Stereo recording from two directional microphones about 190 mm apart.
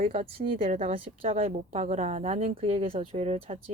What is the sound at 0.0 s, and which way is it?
Speech, 35° right (ahead or behind).